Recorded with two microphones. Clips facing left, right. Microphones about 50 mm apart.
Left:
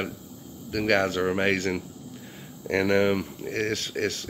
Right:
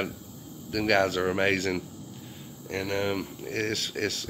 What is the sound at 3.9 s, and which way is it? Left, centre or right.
Speech, centre.